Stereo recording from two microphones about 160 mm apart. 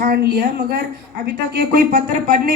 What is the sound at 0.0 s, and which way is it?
A woman's voice, 75° right (ahead or behind).